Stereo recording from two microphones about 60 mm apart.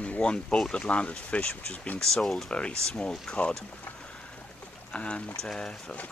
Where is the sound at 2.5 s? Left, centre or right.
Centre.